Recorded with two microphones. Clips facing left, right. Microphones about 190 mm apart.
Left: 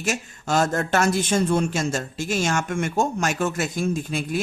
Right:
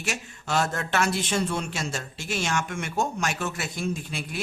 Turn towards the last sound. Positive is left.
turn(degrees=45)  # may be behind; listen again after turning